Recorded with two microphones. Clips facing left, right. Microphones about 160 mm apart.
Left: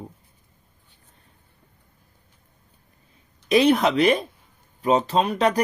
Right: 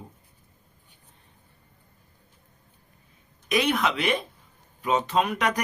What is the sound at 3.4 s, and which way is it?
Speech, 30° left (ahead or behind).